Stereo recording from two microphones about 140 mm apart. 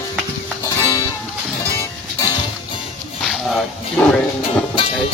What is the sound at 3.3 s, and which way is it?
Speech, centre (ahead or behind).